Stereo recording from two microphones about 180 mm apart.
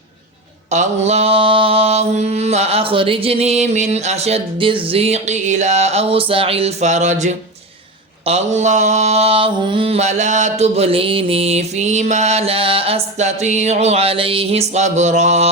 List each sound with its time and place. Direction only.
0.7 s mantra: 40° right (ahead or behind)